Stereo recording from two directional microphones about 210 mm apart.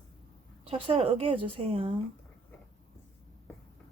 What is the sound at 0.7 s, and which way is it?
Speech, 25° right (ahead or behind).